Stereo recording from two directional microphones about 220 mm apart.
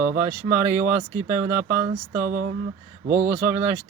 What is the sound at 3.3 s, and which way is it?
Speech, 15° right (ahead or behind).